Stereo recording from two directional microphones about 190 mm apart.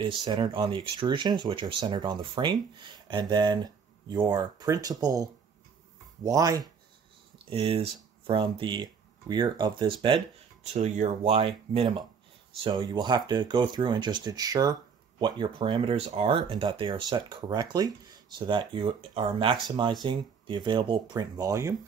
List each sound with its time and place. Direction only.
0.0 s speech: 25° right (ahead or behind)
7.4 s speech: 30° right (ahead or behind)